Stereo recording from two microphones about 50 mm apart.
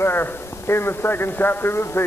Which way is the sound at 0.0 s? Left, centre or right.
Left.